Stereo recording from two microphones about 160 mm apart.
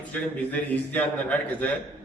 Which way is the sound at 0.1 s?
10° left (ahead or behind).